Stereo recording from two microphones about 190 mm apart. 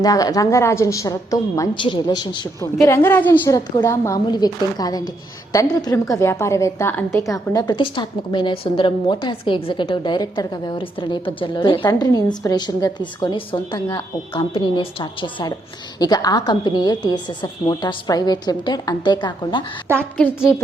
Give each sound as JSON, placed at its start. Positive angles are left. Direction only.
{"t": 0.0, "sound": "a woman's voice", "side_deg": 20}
{"t": 2.8, "sound": "a woman's voice", "side_deg": 10}
{"t": 20.0, "sound": "a woman's voice", "side_deg": 10}